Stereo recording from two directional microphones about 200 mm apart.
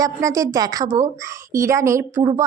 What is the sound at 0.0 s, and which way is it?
A woman's voice, 15° right (ahead or behind).